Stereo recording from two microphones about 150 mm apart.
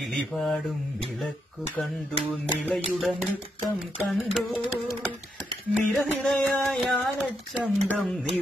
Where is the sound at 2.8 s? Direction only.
Centre (ahead or behind).